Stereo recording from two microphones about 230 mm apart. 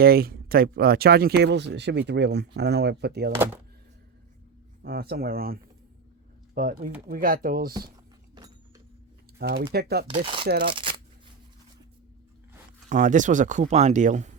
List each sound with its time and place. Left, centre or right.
0.0 s speech: right
3.3 s speech: centre
4.8 s speech: right
8.4 s a sound: centre
9.4 s speech: right
10.1 s speech: right
10.4 s speech: right
10.7 s shuffling cards: right
12.9 s speech: right